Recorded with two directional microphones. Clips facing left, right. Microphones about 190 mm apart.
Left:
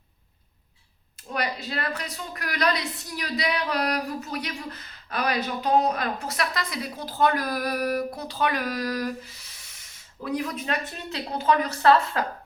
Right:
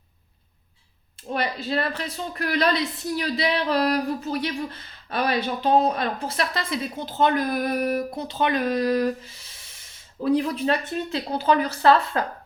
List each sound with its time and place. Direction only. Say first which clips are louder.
1.6 s speech: right 5 dB; 30° right (ahead or behind)